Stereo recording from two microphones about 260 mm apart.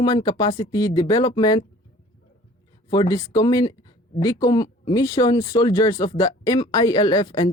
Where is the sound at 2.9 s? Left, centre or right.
Centre.